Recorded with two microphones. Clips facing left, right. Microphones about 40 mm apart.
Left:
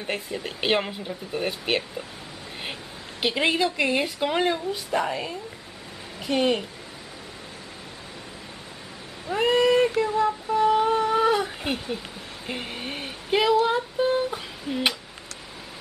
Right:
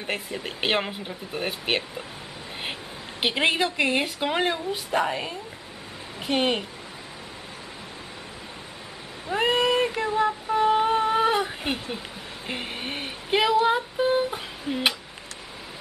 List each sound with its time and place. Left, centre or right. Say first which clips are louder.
0.0 s speech: even; centre
3.2 s speech: even; centre
6.2 s a woman's voice: left 1 dB; right
9.4 s a sound: left 3 dB; right